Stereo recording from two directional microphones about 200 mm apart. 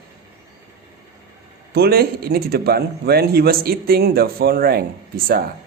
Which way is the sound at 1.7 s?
50° right (ahead or behind).